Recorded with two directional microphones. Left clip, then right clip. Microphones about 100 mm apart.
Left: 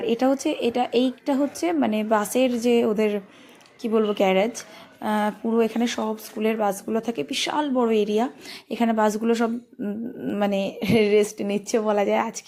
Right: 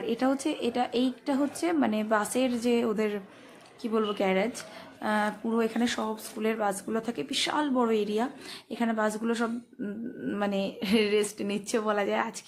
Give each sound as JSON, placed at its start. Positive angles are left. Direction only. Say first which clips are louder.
{"t": 0.0, "sound": "speech", "louder": "left 6 dB", "side_deg": 40}
{"t": 4.1, "sound": "speech", "louder": "left 7 dB", "side_deg": 45}
{"t": 8.7, "sound": "a woman's voice", "louder": "left 7 dB", "side_deg": 55}